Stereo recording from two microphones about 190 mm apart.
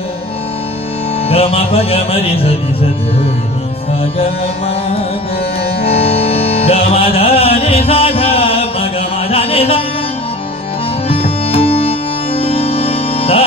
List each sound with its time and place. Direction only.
1.3 s music: 30° left (ahead or behind)
5.8 s music: 30° left (ahead or behind)
11.1 s music: 30° left (ahead or behind)